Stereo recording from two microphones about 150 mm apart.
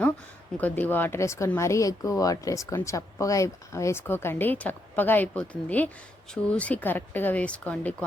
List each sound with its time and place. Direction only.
0.6 s speech: 10° left (ahead or behind)